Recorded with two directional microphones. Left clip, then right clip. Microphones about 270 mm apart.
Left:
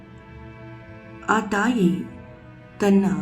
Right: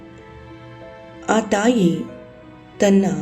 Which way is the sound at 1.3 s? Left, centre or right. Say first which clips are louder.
Right 4 dB; centre.